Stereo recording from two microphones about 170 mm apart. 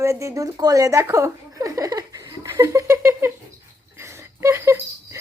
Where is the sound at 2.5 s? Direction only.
15° right (ahead or behind).